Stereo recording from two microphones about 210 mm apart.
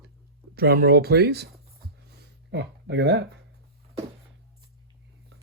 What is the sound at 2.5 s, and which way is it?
Speech, 55° right (ahead or behind).